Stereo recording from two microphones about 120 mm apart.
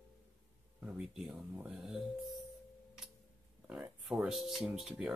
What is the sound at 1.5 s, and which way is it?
Speech, 10° right (ahead or behind).